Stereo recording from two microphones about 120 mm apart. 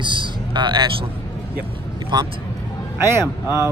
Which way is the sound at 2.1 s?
40° right (ahead or behind).